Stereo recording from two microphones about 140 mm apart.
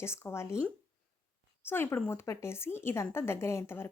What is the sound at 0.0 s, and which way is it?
Speech, 20° left (ahead or behind).